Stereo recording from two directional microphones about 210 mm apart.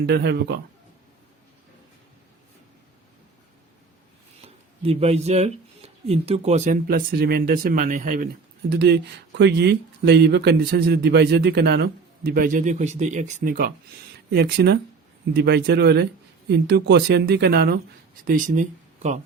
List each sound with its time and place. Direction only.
0.0 s speech: 50° right (ahead or behind)
4.4 s speech: 30° right (ahead or behind)
6.8 s speech: 45° right (ahead or behind)
8.7 s speech: 50° right (ahead or behind); by 19.2 s 35° right (ahead or behind)